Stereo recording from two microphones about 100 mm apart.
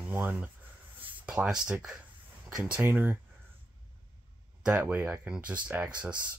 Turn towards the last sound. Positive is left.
turn(degrees=-10)  # may be behind; listen again after turning